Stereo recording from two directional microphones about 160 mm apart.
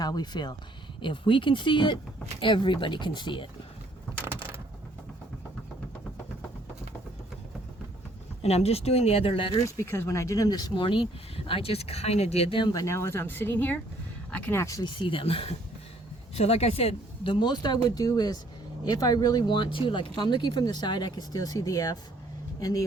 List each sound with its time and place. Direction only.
0.0 s speech: 25° left (ahead or behind)
4.3 s mechanisms: 15° right (ahead or behind)
8.4 s speech: 40° left (ahead or behind)
9.6 s speech: 15° left (ahead or behind); by 12.7 s 35° left (ahead or behind)
12.7 s speech: 20° left (ahead or behind)